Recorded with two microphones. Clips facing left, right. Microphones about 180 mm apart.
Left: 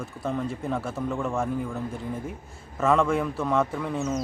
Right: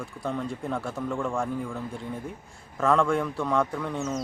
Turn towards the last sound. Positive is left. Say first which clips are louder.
# left 2 dB
turn(degrees=0)  # may be behind; listen again after turning